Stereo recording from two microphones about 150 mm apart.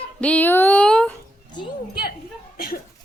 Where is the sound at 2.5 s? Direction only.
80° left.